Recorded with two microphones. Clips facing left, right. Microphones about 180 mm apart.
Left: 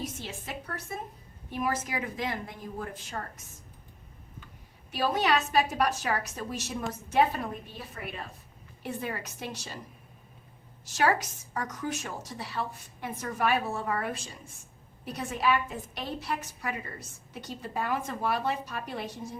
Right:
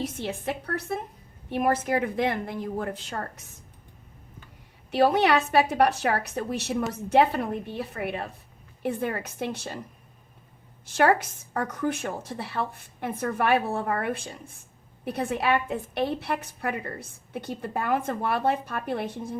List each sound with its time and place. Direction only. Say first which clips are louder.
0.0 s a woman's voice: right 8 dB; 60° right (ahead or behind)
4.9 s a woman's voice: right 6 dB; 65° right (ahead or behind)
10.8 s a woman's voice: right 5 dB; 55° right (ahead or behind)